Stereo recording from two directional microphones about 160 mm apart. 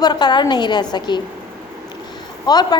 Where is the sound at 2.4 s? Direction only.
25° left (ahead or behind).